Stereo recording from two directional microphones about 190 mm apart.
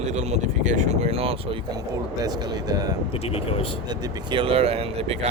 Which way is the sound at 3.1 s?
30° left (ahead or behind).